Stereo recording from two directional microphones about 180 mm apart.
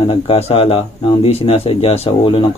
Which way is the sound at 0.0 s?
30° left (ahead or behind).